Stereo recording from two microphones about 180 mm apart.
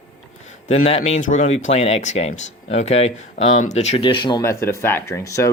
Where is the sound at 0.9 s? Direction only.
35° left (ahead or behind).